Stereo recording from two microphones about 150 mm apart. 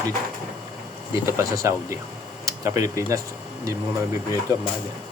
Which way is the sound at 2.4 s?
25° right (ahead or behind).